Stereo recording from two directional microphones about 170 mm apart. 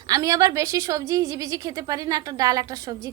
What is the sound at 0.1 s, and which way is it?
A woman's voice, 20° right (ahead or behind).